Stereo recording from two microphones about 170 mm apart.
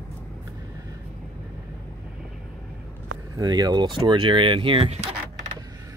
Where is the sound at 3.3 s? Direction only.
20° right (ahead or behind); by 5.1 s 35° right (ahead or behind).